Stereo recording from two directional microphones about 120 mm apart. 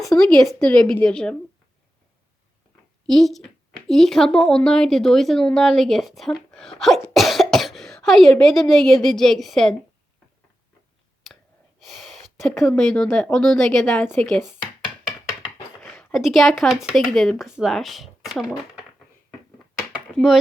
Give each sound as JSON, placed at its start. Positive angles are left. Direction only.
{"t": 0.0, "sound": "a woman's voice", "side_deg": 5}
{"t": 3.1, "sound": "a woman's voice", "side_deg": 0}
{"t": 11.3, "sound": "a sound", "side_deg": 0}
{"t": 11.8, "sound": "speech", "side_deg": 0}
{"t": 14.0, "sound": "speech", "side_deg": 15}
{"t": 14.3, "sound": "a woman's voice", "side_deg": 0}
{"t": 15.8, "sound": "speech", "side_deg": 5}